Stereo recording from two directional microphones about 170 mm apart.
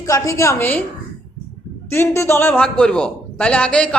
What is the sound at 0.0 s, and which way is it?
Speech, 20° left (ahead or behind).